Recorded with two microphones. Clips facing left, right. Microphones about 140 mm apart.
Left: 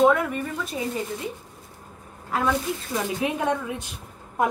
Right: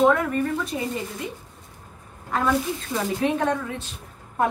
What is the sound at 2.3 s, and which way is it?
A woman's voice, 5° left (ahead or behind).